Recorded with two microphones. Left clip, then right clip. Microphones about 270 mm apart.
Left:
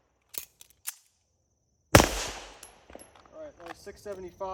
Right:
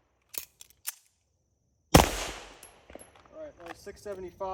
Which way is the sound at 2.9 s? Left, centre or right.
Left.